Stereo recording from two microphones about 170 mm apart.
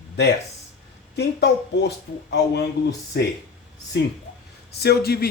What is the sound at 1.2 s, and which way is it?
Speech, 80° left.